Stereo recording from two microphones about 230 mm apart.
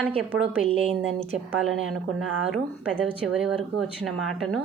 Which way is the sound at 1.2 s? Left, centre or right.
Centre.